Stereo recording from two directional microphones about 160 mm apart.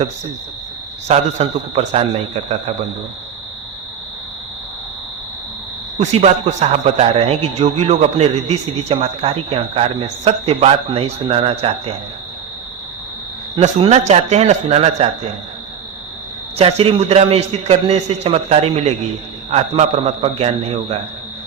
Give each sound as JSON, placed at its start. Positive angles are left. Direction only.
{"t": 1.0, "sound": "a man's voice", "side_deg": -40}
{"t": 6.0, "sound": "a man's voice", "side_deg": -40}
{"t": 13.6, "sound": "a man's voice", "side_deg": -40}
{"t": 16.6, "sound": "a man's voice", "side_deg": -40}